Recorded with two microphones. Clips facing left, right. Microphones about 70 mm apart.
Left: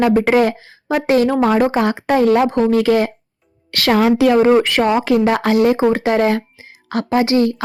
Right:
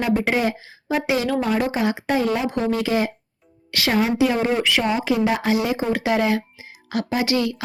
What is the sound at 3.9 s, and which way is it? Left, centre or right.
Speech, left.